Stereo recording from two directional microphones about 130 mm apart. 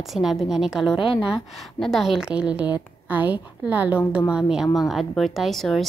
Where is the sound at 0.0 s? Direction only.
Centre (ahead or behind).